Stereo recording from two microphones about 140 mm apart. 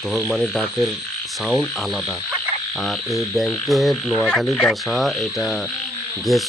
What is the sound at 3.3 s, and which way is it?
Frog, centre (ahead or behind).